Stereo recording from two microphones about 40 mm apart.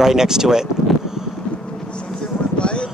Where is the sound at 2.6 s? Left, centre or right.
Left.